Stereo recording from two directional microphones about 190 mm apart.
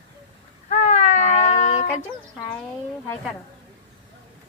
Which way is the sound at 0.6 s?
40° left (ahead or behind).